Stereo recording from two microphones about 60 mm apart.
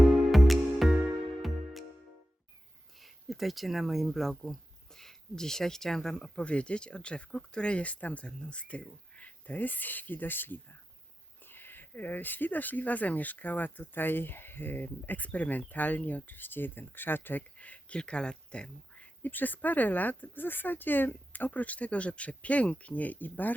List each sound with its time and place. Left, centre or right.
0.3 s music: centre
3.0 s speech: centre; by 17.4 s left
17.6 s speech: left
19.2 s speech: left